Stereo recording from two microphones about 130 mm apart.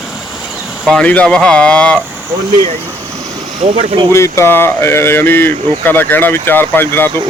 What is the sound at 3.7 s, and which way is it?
Speech, 45° right (ahead or behind).